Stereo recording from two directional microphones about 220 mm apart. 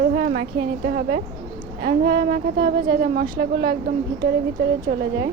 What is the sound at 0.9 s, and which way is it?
Speech, 40° right (ahead or behind).